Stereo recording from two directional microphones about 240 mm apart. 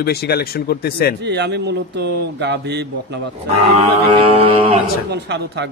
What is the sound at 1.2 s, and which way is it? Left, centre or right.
A man's voice, right.